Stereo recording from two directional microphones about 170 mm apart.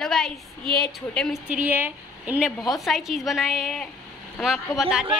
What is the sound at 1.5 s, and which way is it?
A woman's voice, 10° right (ahead or behind).